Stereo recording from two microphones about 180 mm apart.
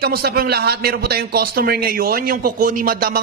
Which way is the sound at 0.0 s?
60° right (ahead or behind).